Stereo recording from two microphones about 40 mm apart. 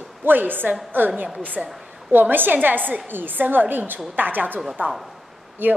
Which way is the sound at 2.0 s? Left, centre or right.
Right.